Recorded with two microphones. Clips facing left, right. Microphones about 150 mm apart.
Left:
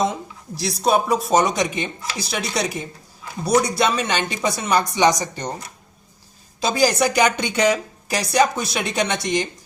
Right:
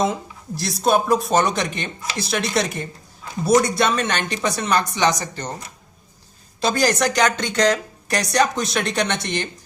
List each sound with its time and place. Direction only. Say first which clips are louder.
0.6 s speech: even; centre (ahead or behind)
6.6 s speech: left 1 dB; centre (ahead or behind)